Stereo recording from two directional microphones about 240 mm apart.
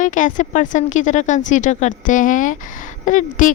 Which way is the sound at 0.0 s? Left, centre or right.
Left.